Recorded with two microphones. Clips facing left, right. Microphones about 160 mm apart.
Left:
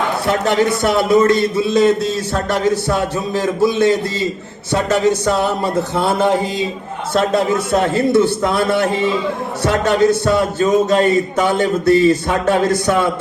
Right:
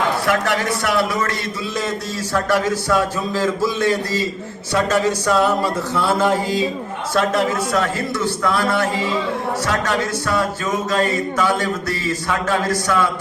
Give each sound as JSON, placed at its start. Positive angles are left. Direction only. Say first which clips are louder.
{"t": 0.3, "sound": "speech", "louder": "left 4 dB", "side_deg": 25}